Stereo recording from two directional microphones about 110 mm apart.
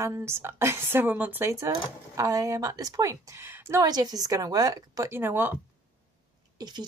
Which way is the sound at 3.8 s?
35° right (ahead or behind).